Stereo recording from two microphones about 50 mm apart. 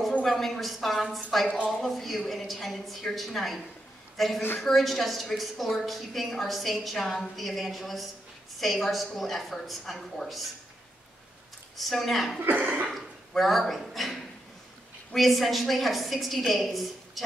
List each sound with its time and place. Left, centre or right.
0.2 s a woman's voice: centre
11.7 s a woman's voice: centre
12.4 s speech: right
13.4 s a woman's voice: centre